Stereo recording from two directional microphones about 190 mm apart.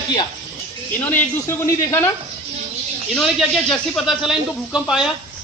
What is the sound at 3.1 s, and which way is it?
Speech, centre (ahead or behind).